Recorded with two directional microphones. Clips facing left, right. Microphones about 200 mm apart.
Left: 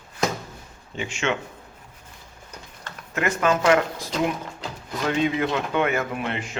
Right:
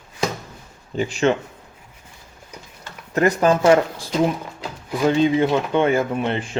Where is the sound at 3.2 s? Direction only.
35° right (ahead or behind).